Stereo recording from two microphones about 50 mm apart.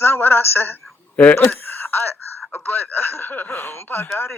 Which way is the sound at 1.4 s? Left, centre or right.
Left.